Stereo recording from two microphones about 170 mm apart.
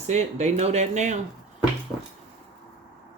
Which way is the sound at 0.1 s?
40° right (ahead or behind).